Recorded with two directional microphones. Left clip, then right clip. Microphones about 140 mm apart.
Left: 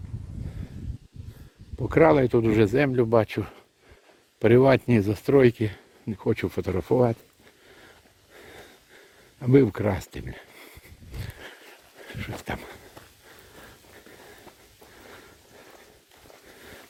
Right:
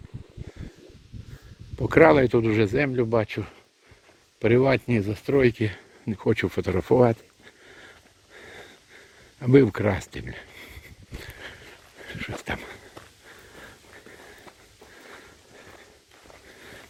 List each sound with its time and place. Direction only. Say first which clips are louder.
1.8 s speech: right 3 dB; 10° right (ahead or behind)
2.0 s speech: right 2 dB; 10° left (ahead or behind)
2.4 s speech: left 1 dB; 30° left (ahead or behind); by 5.4 s 55° left (ahead or behind)
5.5 s speech: right 1 dB; 5° left (ahead or behind)
6.1 s a sound: right 2 dB; centre (ahead or behind)
9.4 s speech: right 2 dB; centre (ahead or behind)
11.3 s dog: right 2 dB; 20° left (ahead or behind)
12.5 s a sound: right 2 dB; 10° left (ahead or behind)